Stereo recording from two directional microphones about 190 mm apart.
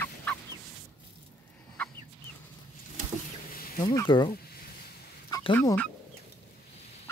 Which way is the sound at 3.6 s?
50° left (ahead or behind).